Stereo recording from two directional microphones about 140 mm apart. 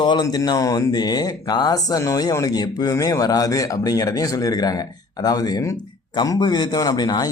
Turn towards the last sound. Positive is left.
turn(degrees=30)  # may be behind; listen again after turning